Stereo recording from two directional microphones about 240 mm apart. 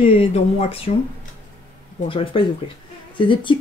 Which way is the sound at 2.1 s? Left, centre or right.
Left.